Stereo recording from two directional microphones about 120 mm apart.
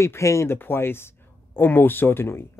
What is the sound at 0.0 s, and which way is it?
Speech, 25° left (ahead or behind).